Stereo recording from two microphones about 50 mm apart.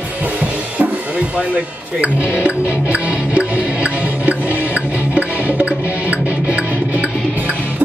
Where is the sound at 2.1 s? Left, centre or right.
Right.